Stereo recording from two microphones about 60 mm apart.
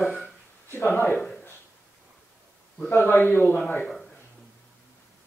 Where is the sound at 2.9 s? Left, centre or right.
Left.